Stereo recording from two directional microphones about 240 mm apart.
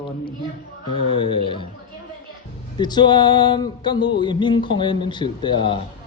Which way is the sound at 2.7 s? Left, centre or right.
Centre.